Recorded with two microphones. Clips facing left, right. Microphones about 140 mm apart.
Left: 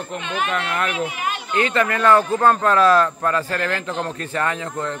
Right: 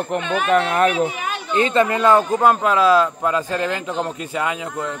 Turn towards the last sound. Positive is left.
turn(degrees=-10)  # may be behind; listen again after turning